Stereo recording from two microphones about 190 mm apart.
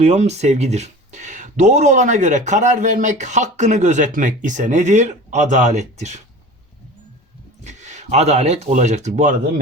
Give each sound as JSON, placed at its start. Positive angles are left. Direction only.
{"t": 0.0, "sound": "speech", "side_deg": -35}
{"t": 7.6, "sound": "speech", "side_deg": -40}